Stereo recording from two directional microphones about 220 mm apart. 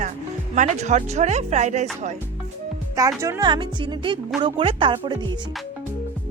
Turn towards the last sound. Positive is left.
turn(degrees=-20)  # may be behind; listen again after turning